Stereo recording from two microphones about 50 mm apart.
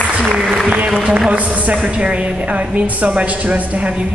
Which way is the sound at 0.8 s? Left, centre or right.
Centre.